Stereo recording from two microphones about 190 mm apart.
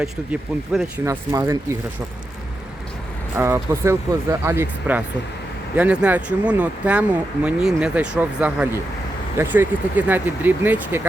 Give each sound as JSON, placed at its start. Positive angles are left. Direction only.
{"t": 0.0, "sound": "speech", "side_deg": -5}
{"t": 1.0, "sound": "speech", "side_deg": -15}
{"t": 3.3, "sound": "speech", "side_deg": -15}